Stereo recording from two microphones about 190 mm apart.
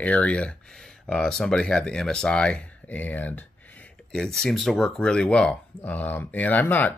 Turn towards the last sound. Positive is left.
turn(degrees=10)  # may be behind; listen again after turning